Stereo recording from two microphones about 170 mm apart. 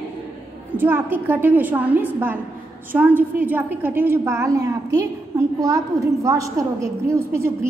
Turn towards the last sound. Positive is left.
turn(degrees=-15)  # may be behind; listen again after turning